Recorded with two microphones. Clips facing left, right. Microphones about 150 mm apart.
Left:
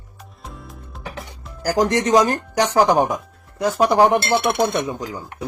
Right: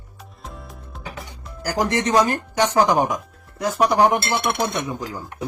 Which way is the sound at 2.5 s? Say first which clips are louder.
Left 2 dB; 35° left (ahead or behind).